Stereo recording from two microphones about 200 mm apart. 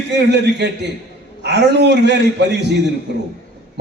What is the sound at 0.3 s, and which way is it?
A man's voice, 60° right (ahead or behind).